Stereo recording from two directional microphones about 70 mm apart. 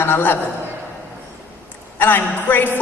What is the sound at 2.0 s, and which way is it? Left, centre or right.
Speech, left.